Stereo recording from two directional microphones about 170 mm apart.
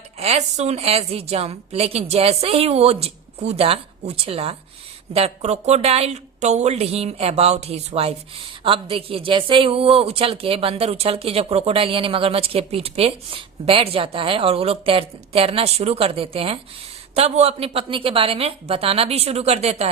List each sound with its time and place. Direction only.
0.2 s speech: 40° right (ahead or behind)